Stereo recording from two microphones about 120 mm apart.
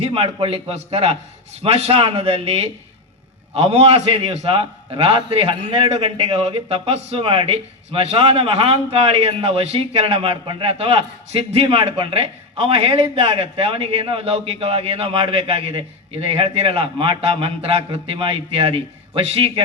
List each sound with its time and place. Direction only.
0.0 s a man's voice: 55° right (ahead or behind)